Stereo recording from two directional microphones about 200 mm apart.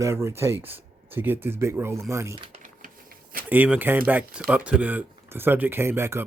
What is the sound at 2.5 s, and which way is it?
Typewriter, 40° right (ahead or behind).